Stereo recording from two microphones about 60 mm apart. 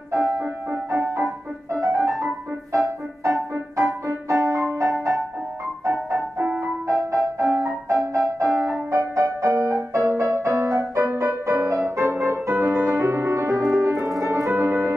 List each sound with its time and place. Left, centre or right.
0.1 s music: right
9.9 s music: right
11.4 s music: right
13.0 s music: right